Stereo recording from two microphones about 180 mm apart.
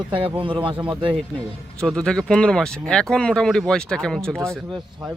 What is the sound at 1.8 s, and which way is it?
Speech, 5° left (ahead or behind).